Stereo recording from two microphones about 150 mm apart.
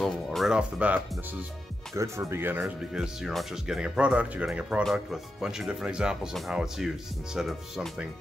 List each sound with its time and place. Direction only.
0.0 s speech: centre (ahead or behind); by 2.6 s 15° right (ahead or behind)
2.6 s speech: 5° right (ahead or behind)